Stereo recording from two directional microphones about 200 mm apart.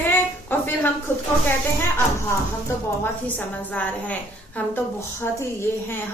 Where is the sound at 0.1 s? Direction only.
10° left (ahead or behind).